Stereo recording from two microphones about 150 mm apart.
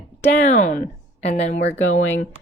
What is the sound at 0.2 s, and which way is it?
Speech, 55° left (ahead or behind).